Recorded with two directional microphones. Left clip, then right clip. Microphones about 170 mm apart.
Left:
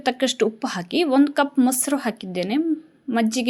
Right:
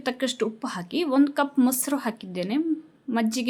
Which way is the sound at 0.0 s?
15° left (ahead or behind).